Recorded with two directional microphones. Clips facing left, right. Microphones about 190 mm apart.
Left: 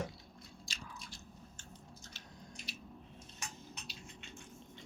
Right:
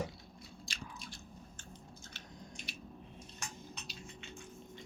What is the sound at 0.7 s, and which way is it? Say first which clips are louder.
Biting: right 2 dB; 55° right (ahead or behind).